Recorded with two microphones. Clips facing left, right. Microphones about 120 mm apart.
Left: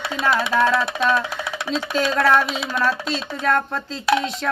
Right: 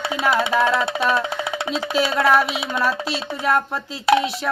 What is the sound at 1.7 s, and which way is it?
Speech, 10° right (ahead or behind).